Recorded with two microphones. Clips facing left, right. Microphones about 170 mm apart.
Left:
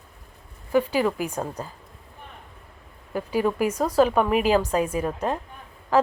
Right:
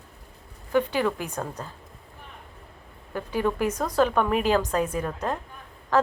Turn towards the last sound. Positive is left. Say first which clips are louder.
# left 2 dB
turn(degrees=10)  # may be behind; listen again after turning